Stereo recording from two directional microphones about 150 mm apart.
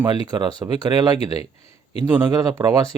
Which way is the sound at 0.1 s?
25° right (ahead or behind).